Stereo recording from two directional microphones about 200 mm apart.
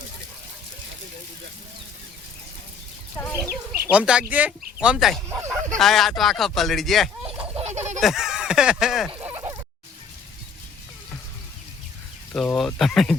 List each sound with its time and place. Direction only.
3.4 s speech: 5° right (ahead or behind)
5.7 s speech: centre (ahead or behind)
7.6 s fowl: 35° right (ahead or behind)
8.0 s speech: centre (ahead or behind)
12.3 s speech: 5° left (ahead or behind)